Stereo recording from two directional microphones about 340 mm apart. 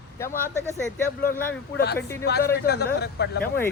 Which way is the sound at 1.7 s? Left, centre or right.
Left.